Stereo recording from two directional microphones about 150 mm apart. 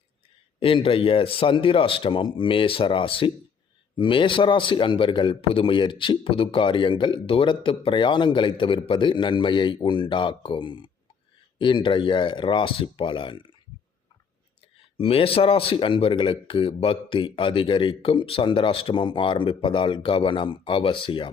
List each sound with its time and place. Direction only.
0.6 s a man's voice: 35° left (ahead or behind)
14.8 s a man's voice: 40° left (ahead or behind)